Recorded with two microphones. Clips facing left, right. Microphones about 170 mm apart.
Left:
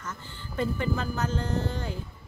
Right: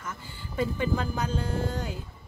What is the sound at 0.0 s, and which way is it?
Speech, 10° right (ahead or behind).